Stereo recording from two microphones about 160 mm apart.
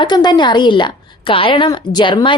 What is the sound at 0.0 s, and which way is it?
A woman's voice, 25° left (ahead or behind).